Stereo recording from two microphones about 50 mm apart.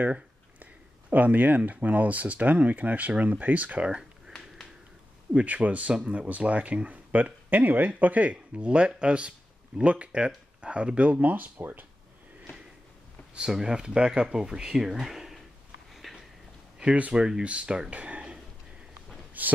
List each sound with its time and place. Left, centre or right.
1.1 s speech: right
5.3 s speech: right
13.5 s speech: centre
15.9 s a sound: centre
17.1 s speech: centre
19.4 s speech: right